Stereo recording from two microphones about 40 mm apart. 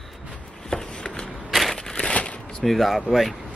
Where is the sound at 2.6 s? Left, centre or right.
Centre.